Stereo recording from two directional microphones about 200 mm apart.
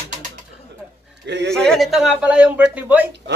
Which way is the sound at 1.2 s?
60° right (ahead or behind).